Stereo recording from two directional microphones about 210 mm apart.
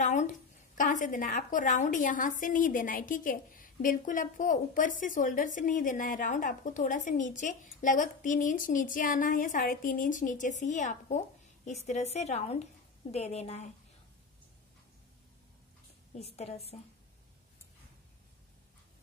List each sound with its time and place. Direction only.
0.0 s speech: 35° left (ahead or behind)
16.2 s speech: 30° left (ahead or behind)